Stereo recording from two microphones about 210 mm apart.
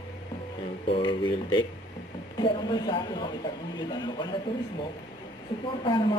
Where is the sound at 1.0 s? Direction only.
20° left (ahead or behind).